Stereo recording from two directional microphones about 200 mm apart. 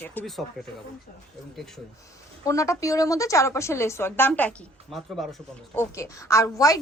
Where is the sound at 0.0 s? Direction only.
10° left (ahead or behind).